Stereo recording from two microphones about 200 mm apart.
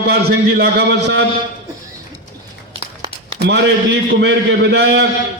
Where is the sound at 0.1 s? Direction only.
55° right (ahead or behind).